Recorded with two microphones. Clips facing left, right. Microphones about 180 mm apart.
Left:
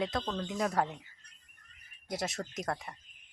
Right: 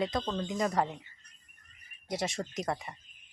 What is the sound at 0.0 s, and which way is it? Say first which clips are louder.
Speech: right 2 dB; centre (ahead or behind).